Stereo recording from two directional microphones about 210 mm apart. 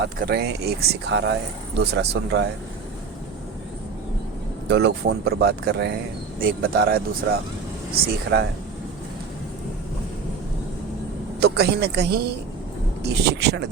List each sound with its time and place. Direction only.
0.2 s speech: 50° right (ahead or behind)
4.7 s speech: 50° right (ahead or behind)
11.3 s speech: 50° right (ahead or behind)